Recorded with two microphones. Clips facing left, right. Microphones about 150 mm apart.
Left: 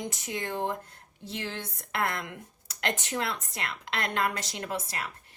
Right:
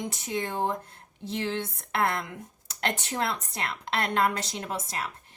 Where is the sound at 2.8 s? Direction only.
35° right (ahead or behind).